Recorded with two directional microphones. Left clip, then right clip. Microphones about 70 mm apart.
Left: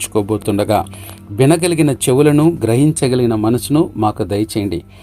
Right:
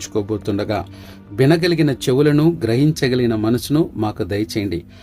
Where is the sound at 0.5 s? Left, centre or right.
Left.